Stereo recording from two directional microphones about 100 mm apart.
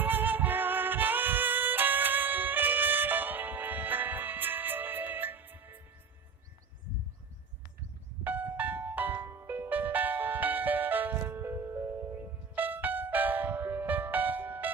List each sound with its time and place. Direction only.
0.0 s music: 20° right (ahead or behind)
8.2 s music: 15° right (ahead or behind)